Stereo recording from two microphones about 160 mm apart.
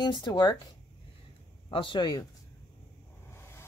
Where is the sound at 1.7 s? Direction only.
30° left (ahead or behind).